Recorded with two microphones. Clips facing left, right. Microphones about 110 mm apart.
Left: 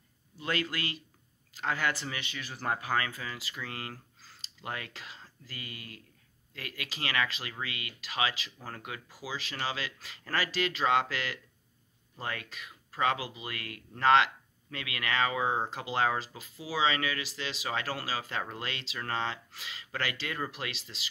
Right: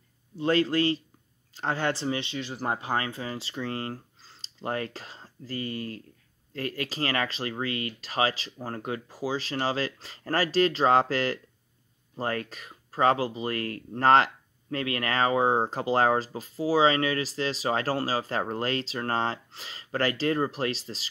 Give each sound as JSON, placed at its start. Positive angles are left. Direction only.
{"t": 0.4, "sound": "speech", "side_deg": -30}